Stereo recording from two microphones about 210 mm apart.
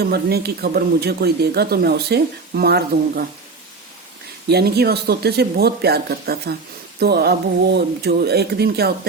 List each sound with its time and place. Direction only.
0.0 s speech: 50° right (ahead or behind)
4.4 s speech: 50° right (ahead or behind)